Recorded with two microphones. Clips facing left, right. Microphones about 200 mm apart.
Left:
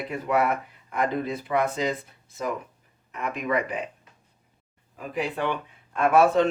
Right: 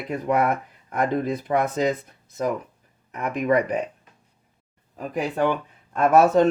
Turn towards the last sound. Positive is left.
turn(degrees=-45)  # may be behind; listen again after turning